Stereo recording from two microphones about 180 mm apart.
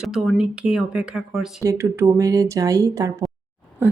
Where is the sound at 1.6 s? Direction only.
15° right (ahead or behind).